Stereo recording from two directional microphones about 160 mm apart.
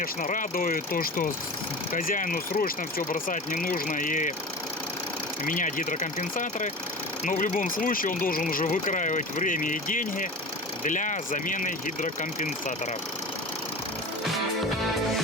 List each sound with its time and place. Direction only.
0.0 s speech: 55° left (ahead or behind)
5.5 s speech: 55° left (ahead or behind)